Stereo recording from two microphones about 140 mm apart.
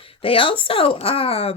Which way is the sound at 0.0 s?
40° left (ahead or behind).